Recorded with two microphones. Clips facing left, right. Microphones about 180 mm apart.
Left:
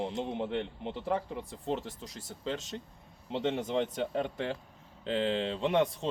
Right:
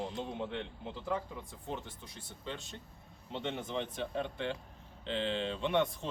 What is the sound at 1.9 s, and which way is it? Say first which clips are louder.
Speech: left 6 dB; 90° left.